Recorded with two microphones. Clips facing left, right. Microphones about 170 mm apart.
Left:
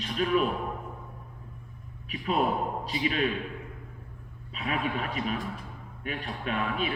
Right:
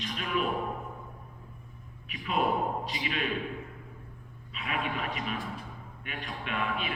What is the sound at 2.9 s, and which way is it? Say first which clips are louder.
Speech: left 5 dB; 40° left (ahead or behind).